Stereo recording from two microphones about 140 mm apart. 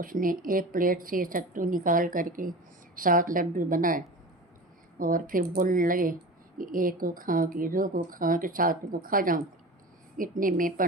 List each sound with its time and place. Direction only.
0.0 s a woman's voice: 80° right